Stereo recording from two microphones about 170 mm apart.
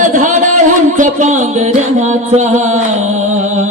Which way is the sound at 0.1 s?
50° right (ahead or behind).